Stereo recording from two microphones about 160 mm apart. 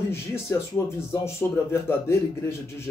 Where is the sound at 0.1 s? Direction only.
15° left (ahead or behind).